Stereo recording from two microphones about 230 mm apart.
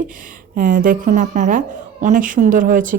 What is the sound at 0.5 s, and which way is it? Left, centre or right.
Speech, right.